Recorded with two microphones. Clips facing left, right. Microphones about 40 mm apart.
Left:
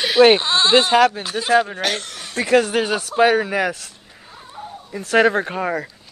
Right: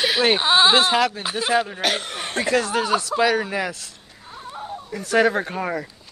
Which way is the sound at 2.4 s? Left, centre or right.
Right.